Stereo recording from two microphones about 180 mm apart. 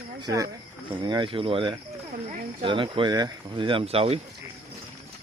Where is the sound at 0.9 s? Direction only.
25° right (ahead or behind).